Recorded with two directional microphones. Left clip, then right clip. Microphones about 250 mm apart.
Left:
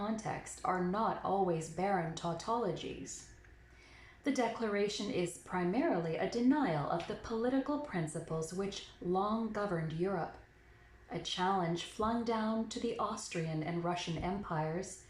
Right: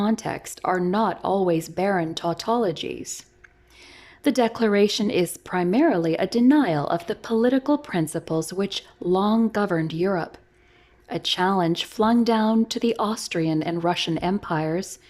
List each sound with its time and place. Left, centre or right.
0.0 s a woman's voice: right
4.2 s a woman's voice: right